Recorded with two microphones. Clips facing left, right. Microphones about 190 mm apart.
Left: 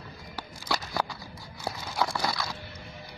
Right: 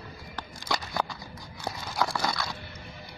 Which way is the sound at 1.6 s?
5° left (ahead or behind).